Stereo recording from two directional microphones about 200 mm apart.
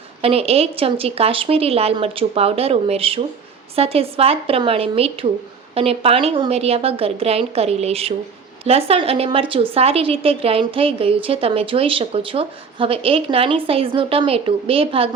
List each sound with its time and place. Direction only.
0.2 s a woman's voice: 30° right (ahead or behind)